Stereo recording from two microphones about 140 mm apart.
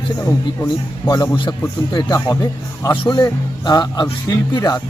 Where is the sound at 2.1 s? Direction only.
20° left (ahead or behind).